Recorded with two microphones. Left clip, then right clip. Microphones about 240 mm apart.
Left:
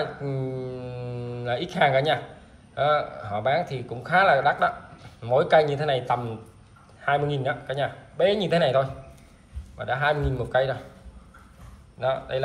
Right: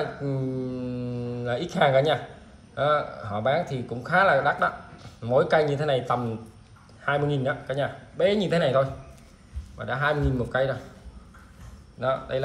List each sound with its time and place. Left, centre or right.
0.0 s mantra: centre
2.7 s speech: centre
12.0 s speech: centre